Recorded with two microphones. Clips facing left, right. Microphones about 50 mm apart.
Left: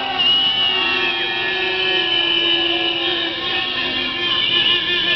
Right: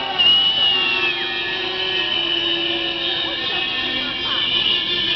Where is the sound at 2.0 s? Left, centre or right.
Left.